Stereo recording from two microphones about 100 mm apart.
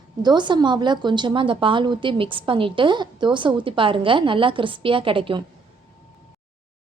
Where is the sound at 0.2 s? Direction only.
45° right (ahead or behind).